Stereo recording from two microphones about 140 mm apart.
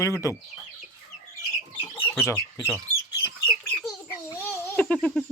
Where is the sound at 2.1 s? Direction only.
20° left (ahead or behind).